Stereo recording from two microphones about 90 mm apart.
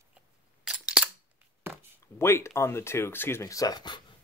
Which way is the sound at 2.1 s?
30° left (ahead or behind).